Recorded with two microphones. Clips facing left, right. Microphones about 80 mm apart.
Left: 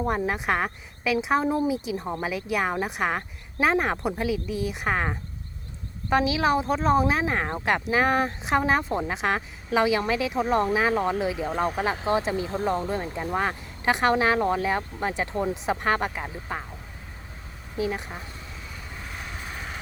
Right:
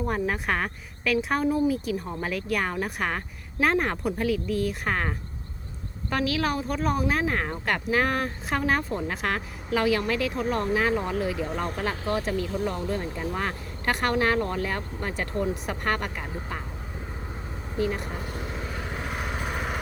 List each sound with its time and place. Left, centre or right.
0.0 s speech: centre
7.2 s speech: centre
10.5 s speech: left
10.8 s speech: centre; by 13.1 s left
13.1 s speech: centre
17.7 s speech: centre
18.3 s vehicle: right